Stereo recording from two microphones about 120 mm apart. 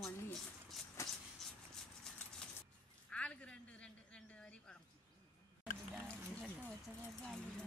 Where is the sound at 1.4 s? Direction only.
Centre (ahead or behind).